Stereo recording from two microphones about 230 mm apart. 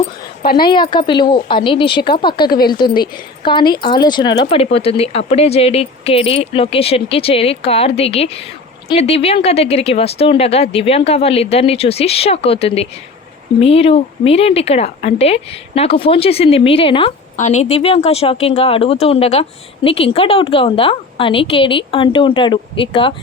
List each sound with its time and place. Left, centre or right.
0.5 s speech: left